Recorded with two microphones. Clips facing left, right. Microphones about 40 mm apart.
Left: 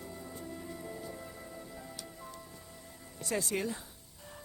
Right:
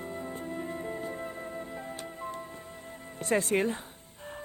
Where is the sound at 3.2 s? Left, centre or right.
Right.